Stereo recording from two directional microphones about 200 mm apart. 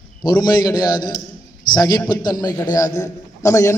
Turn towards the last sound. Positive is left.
turn(degrees=15)  # may be behind; listen again after turning